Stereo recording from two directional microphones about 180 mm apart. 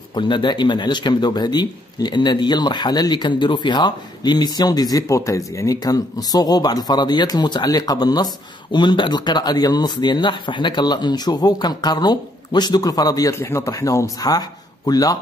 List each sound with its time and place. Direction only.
0.1 s speech: 25° left (ahead or behind)